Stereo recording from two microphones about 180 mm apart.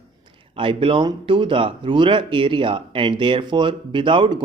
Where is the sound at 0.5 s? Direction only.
30° right (ahead or behind).